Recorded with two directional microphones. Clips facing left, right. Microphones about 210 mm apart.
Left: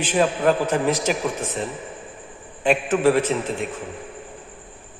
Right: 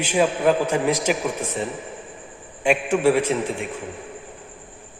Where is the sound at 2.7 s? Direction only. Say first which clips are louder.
Even; 10° right (ahead or behind).